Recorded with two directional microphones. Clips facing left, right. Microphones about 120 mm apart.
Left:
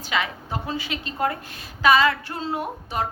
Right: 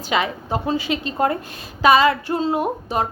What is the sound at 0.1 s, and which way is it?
A woman's voice, 25° right (ahead or behind).